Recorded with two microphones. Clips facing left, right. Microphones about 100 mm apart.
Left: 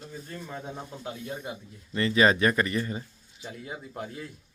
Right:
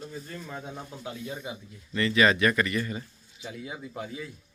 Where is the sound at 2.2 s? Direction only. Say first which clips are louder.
Left 1 dB; 30° left (ahead or behind).